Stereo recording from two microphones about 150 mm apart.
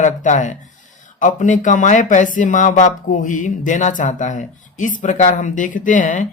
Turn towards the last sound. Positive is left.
turn(degrees=60)  # may be behind; listen again after turning